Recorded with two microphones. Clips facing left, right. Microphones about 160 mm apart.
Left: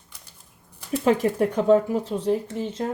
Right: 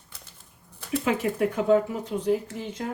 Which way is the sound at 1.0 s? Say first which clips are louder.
Left 5 dB; 35° left (ahead or behind).